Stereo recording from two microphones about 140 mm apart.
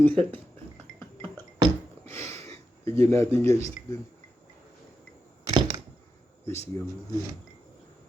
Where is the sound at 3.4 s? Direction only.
20° left (ahead or behind).